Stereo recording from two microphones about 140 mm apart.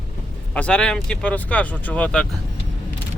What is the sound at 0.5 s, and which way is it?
Speech, 10° left (ahead or behind).